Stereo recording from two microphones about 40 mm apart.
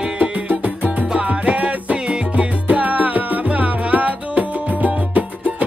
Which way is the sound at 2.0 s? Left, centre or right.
Right.